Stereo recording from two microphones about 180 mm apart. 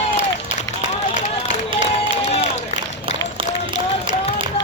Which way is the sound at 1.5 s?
40° left (ahead or behind).